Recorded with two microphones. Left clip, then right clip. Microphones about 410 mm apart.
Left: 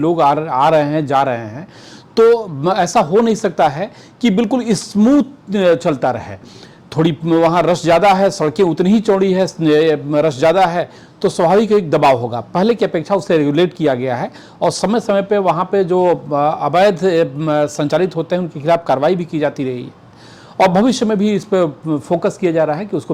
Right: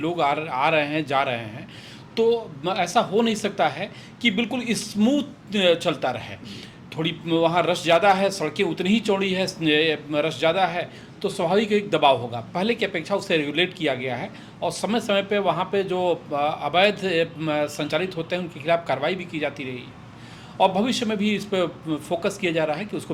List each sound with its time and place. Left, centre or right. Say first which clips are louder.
0.0 s a man's voice: left 10 dB; left